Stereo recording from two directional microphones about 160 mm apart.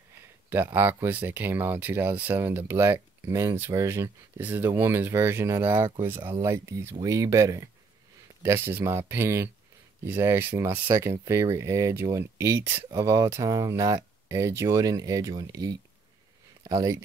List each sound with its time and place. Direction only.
0.5 s speech: 15° right (ahead or behind)